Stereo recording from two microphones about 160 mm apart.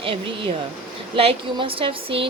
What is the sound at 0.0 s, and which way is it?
Speech, 35° right (ahead or behind).